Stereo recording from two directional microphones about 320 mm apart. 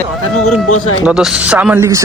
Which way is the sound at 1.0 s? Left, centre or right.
Centre.